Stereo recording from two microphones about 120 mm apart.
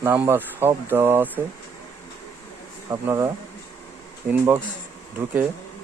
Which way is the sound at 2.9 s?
25° right (ahead or behind).